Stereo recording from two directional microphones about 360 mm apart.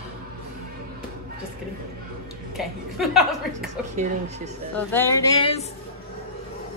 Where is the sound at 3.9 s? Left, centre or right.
Centre.